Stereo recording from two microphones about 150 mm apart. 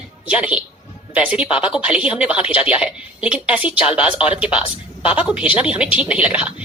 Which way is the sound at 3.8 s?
40° left (ahead or behind).